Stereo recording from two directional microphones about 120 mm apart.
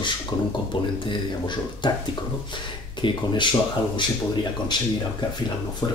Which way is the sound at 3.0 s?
45° left (ahead or behind).